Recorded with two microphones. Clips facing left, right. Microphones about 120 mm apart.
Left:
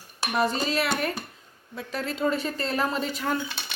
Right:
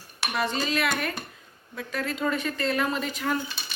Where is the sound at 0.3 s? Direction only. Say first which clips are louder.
Left 2 dB; 40° left (ahead or behind).